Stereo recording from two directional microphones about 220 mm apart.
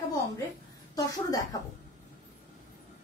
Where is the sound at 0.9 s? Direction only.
15° left (ahead or behind).